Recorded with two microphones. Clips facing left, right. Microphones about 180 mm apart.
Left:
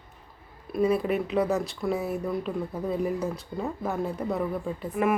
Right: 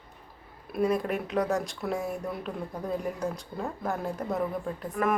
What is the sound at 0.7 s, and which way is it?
Speech, 5° left (ahead or behind).